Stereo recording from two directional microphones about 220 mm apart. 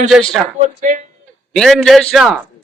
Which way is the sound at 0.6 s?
35° right (ahead or behind).